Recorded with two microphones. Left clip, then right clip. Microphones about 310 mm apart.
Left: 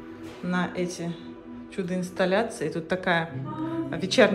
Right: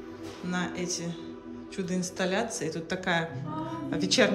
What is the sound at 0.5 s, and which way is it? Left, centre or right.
Speech, centre.